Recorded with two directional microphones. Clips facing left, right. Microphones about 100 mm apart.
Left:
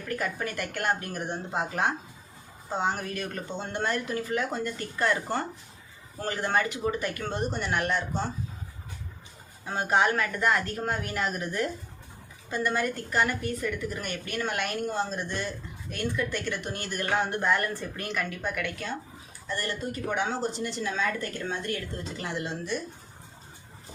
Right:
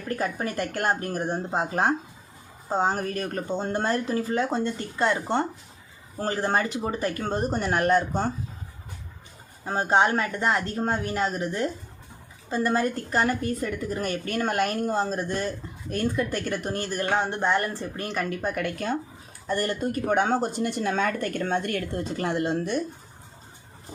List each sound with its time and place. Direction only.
0.1 s a woman's voice: 35° right (ahead or behind)
9.6 s a woman's voice: 35° right (ahead or behind); by 22.8 s 50° right (ahead or behind)